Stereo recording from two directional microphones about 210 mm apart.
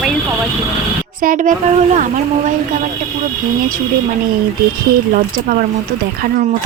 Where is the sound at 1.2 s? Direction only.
40° right (ahead or behind).